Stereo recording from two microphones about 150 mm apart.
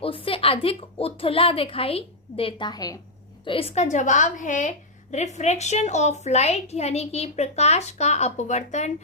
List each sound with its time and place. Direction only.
0.0 s a woman's voice: 35° left (ahead or behind)
3.4 s a woman's voice: 40° left (ahead or behind)